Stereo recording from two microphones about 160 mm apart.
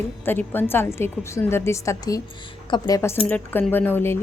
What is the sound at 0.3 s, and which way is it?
A woman's voice, 10° left (ahead or behind).